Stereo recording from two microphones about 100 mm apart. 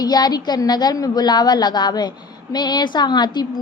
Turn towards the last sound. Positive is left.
turn(degrees=45)  # may be behind; listen again after turning